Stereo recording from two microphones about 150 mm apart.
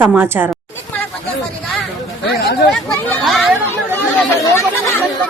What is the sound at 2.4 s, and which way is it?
Speech, 90° left.